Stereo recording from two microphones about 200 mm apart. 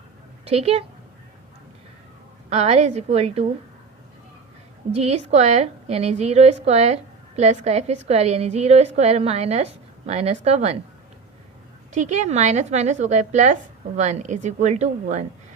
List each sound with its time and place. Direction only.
0.4 s a woman's voice: 30° right (ahead or behind)
2.5 s a woman's voice: 35° right (ahead or behind)
4.9 s a woman's voice: 35° right (ahead or behind)
11.9 s a woman's voice: 35° right (ahead or behind)